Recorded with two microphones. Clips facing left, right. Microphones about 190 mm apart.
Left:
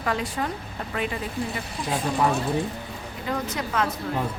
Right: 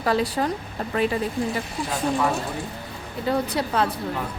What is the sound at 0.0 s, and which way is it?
Speech, 35° right (ahead or behind).